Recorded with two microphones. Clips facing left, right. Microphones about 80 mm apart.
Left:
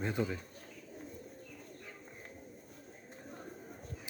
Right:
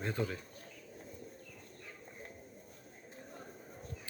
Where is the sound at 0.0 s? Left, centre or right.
Centre.